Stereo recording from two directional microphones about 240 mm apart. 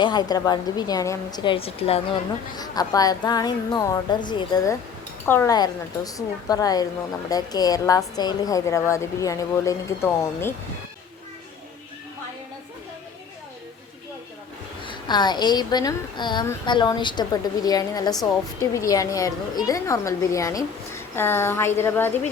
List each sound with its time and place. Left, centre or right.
0.0 s a woman's voice: centre
14.8 s a woman's voice: centre